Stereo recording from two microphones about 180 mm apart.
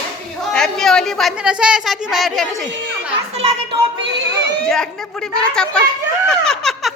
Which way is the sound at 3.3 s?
35° right (ahead or behind).